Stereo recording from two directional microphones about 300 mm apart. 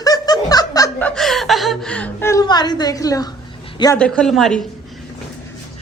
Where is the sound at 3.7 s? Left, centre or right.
Centre.